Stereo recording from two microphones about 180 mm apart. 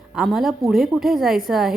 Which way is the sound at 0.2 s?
Centre (ahead or behind).